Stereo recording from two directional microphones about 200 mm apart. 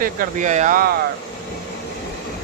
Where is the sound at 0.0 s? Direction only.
40° right (ahead or behind).